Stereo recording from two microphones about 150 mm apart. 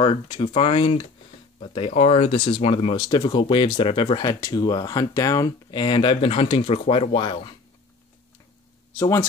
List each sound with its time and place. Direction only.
0.0 s speech: 35° left (ahead or behind)
8.9 s speech: 20° left (ahead or behind)